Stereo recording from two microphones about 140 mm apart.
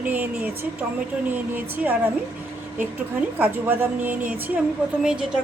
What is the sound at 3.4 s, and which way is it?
A woman's voice, 10° right (ahead or behind).